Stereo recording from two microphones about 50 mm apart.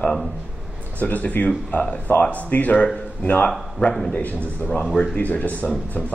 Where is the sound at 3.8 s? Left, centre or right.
Centre.